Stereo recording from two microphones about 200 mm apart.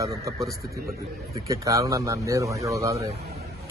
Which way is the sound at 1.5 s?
15° right (ahead or behind).